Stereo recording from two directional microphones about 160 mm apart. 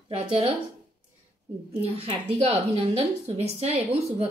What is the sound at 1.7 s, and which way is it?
A woman's voice, 40° right (ahead or behind).